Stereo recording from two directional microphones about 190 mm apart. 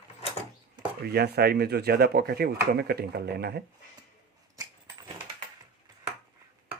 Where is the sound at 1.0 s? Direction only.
55° right (ahead or behind).